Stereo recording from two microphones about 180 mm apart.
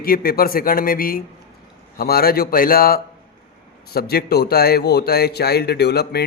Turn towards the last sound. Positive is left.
turn(degrees=65)  # may be behind; listen again after turning